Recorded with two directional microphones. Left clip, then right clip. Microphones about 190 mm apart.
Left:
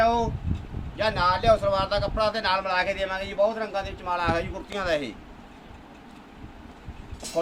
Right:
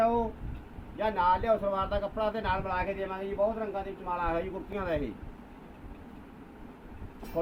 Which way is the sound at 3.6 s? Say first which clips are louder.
Left 5 dB; 25° left (ahead or behind).